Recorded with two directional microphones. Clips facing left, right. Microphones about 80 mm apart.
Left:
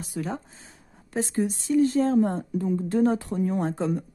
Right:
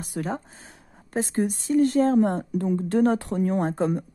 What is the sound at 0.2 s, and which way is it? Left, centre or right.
Speech, right.